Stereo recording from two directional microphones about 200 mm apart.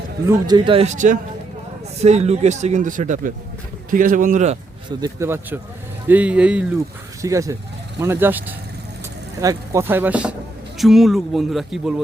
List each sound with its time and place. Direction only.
0.3 s a man's voice: 20° right (ahead or behind)
0.9 s speech: 40° right (ahead or behind)
4.9 s speech: 20° right (ahead or behind); by 12.0 s centre (ahead or behind)